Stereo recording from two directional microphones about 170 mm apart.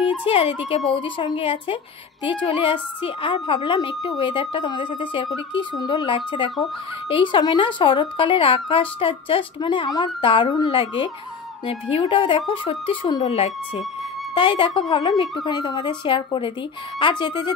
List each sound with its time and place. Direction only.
0.2 s speech: 35° left (ahead or behind)